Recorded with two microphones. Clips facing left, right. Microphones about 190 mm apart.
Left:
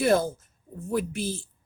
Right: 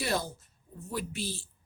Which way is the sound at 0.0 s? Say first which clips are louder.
Left 10 dB; 50° left (ahead or behind).